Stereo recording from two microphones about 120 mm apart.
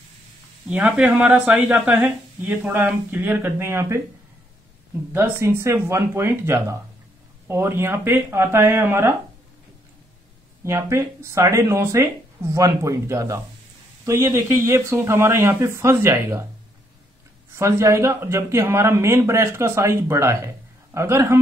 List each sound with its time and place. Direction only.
0.7 s speech: 10° right (ahead or behind)
5.1 s speech: 20° right (ahead or behind)
10.6 s speech: 25° right (ahead or behind)
17.6 s speech: 25° right (ahead or behind)